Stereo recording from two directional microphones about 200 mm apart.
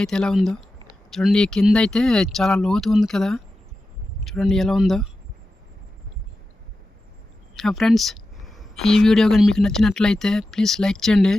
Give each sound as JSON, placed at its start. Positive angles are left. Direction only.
{"t": 0.0, "sound": "speech", "side_deg": 5}
{"t": 7.5, "sound": "speech", "side_deg": 0}